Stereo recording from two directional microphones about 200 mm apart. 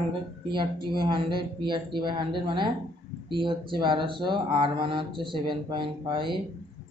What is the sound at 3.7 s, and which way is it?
Speech, 25° right (ahead or behind).